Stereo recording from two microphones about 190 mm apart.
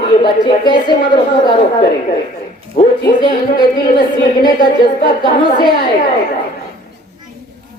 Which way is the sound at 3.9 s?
50° left (ahead or behind).